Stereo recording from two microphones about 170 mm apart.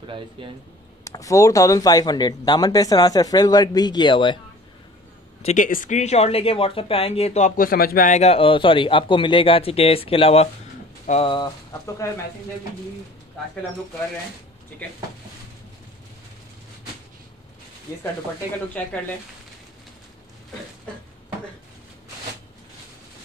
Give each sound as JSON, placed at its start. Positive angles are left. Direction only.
{"t": 0.0, "sound": "speech", "side_deg": -30}
{"t": 1.0, "sound": "speech", "side_deg": 20}
{"t": 5.4, "sound": "speech", "side_deg": 45}
{"t": 18.8, "sound": "speech", "side_deg": 10}